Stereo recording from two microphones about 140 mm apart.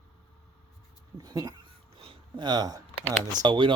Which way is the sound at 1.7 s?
40° right (ahead or behind).